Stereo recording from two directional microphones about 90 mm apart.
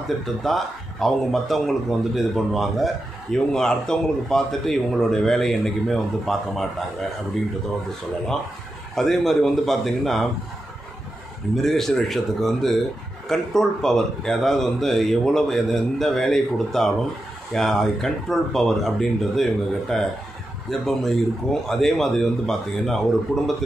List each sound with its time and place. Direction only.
0.4 s speech: centre (ahead or behind)
8.9 s speech: 5° left (ahead or behind)
11.5 s speech: 5° left (ahead or behind)